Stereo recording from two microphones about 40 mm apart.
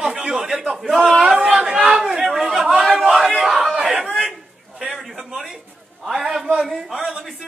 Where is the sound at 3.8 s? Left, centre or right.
Right.